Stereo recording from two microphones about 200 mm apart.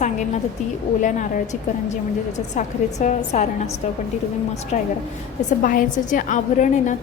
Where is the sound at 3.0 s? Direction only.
35° left (ahead or behind).